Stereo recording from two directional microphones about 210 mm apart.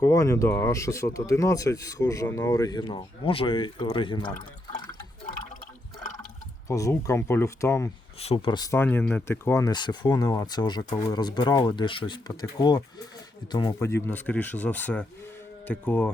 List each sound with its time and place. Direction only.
0.0 s speech: 15° left (ahead or behind)
6.7 s speech: 15° left (ahead or behind)
8.2 s speech: 25° left (ahead or behind); by 16.1 s 5° left (ahead or behind)